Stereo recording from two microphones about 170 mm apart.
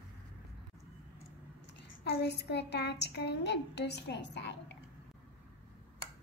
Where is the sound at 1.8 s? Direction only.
80° left.